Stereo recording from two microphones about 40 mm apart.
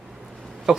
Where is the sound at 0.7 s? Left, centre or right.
Centre.